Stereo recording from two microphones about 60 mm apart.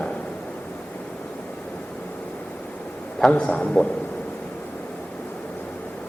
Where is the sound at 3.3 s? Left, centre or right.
Left.